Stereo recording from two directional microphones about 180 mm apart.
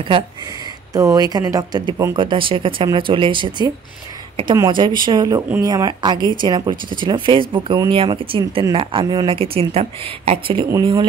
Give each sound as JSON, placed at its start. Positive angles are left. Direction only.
{"t": 0.9, "sound": "speech", "side_deg": -20}